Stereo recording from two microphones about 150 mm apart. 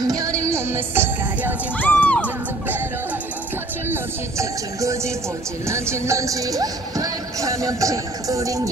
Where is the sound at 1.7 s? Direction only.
10° left (ahead or behind).